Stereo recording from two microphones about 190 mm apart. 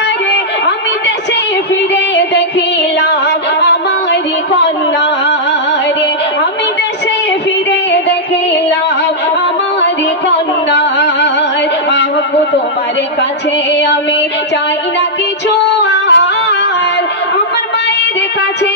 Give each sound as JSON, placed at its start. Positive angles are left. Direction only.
{"t": 3.6, "sound": "a sound", "side_deg": 65}
{"t": 10.7, "sound": "music", "side_deg": 65}
{"t": 15.8, "sound": "music", "side_deg": 65}